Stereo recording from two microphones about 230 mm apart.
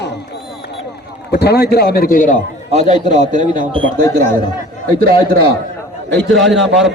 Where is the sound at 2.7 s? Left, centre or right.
Right.